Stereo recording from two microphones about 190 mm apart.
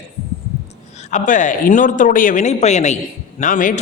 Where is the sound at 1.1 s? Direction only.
40° left (ahead or behind).